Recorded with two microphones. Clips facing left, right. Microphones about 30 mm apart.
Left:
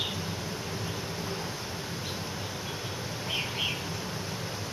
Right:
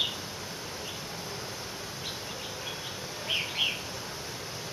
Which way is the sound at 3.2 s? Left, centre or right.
Centre.